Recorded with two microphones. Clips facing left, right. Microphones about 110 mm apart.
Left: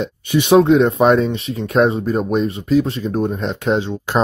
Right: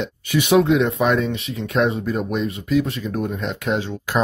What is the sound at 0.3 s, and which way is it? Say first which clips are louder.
Speech: left 4 dB; 30° left (ahead or behind).